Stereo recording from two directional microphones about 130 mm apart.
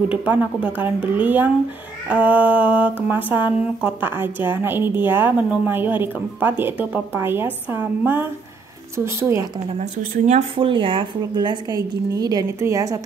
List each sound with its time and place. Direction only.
0.1 s a woman's voice: 10° right (ahead or behind)
9.8 s speech: 65° right (ahead or behind)
10.5 s a woman's voice: 40° right (ahead or behind); by 13.0 s 25° right (ahead or behind)